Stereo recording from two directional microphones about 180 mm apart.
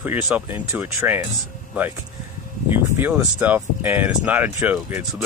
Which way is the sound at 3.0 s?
10° right (ahead or behind).